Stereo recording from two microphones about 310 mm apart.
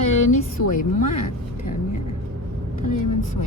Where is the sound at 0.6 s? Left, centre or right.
Left.